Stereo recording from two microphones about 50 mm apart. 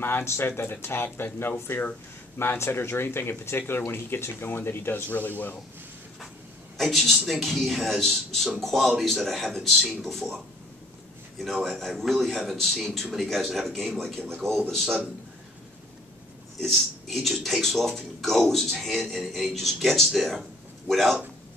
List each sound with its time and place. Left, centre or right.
0.4 s speech: left
2.3 s speech: left
5.1 s a man's voice: left
6.8 s speech: centre
11.3 s speech: centre
16.5 s speech: centre